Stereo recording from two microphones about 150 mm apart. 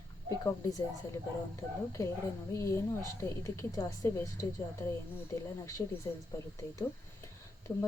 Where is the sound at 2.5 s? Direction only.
20° left (ahead or behind).